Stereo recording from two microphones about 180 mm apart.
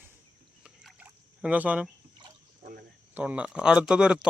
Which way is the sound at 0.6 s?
5° right (ahead or behind).